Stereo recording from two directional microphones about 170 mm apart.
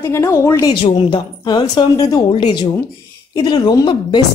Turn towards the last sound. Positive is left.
turn(degrees=25)  # may be behind; listen again after turning